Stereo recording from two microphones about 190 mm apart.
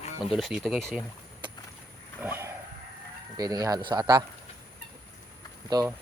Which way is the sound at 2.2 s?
10° right (ahead or behind).